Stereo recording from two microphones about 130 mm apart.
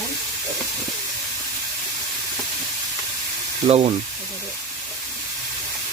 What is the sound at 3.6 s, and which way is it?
Speech, 50° right (ahead or behind).